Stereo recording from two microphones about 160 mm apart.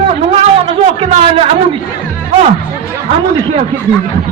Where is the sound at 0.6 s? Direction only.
40° right (ahead or behind).